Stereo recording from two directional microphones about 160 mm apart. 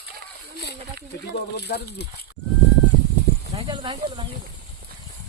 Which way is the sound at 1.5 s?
90° left.